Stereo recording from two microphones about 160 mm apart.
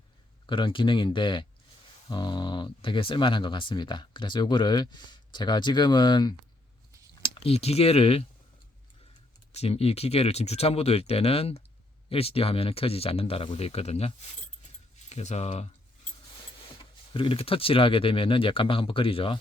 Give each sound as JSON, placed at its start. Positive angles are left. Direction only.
{"t": 0.4, "sound": "speech", "side_deg": 30}
{"t": 7.2, "sound": "speech", "side_deg": 40}
{"t": 9.5, "sound": "speech", "side_deg": 40}
{"t": 17.2, "sound": "speech", "side_deg": 35}